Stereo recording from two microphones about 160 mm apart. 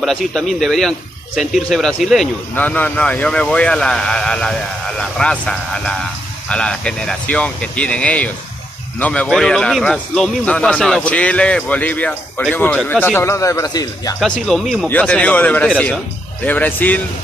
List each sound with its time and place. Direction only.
0.0 s speech: centre (ahead or behind); by 14.1 s 20° left (ahead or behind)
14.2 s speech: 5° left (ahead or behind)